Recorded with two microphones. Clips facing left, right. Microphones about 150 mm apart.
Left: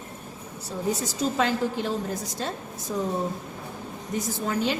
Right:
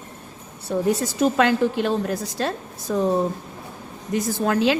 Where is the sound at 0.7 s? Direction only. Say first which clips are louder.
Right 7 dB; 65° right (ahead or behind).